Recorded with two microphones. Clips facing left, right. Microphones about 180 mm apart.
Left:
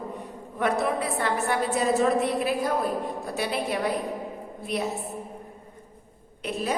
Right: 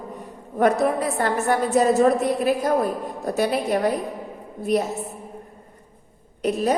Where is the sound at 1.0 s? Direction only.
45° right (ahead or behind).